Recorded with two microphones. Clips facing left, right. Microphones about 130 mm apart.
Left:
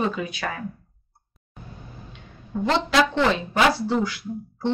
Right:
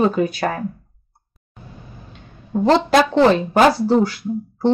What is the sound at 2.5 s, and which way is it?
Speech, 40° right (ahead or behind).